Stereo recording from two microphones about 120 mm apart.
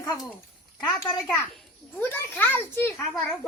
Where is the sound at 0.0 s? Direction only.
30° left (ahead or behind).